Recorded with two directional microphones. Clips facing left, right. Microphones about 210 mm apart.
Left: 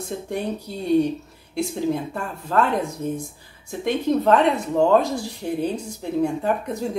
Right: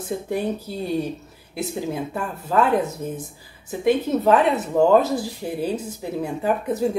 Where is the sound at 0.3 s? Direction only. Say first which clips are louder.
Right 2 dB; 5° right (ahead or behind).